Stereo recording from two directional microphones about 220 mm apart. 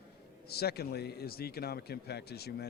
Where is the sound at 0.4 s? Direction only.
45° left (ahead or behind).